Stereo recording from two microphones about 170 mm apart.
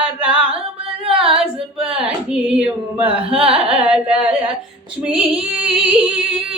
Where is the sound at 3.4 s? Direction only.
35° right (ahead or behind).